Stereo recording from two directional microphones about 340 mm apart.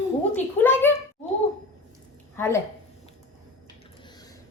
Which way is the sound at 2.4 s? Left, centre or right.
Centre.